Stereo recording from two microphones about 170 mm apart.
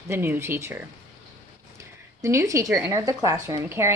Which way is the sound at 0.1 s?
15° right (ahead or behind).